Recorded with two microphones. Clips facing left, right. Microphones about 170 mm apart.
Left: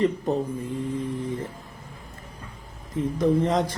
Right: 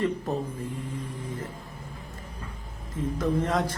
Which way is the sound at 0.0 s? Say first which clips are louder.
Left 4 dB; 15° left (ahead or behind).